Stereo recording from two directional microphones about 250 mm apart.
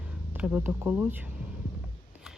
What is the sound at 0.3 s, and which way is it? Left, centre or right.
Speech, centre.